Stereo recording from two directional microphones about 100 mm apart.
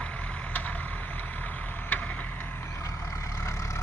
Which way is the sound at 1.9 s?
15° left (ahead or behind).